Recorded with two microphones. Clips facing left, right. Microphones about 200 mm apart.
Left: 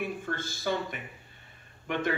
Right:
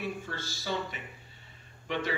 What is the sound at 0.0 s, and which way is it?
Speech, 50° left (ahead or behind).